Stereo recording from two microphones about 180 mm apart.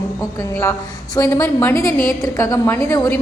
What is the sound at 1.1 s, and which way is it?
A woman's voice, 15° left (ahead or behind).